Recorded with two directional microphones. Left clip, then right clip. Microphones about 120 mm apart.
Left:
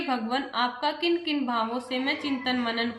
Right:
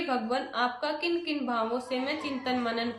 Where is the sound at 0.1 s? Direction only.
30° right (ahead or behind).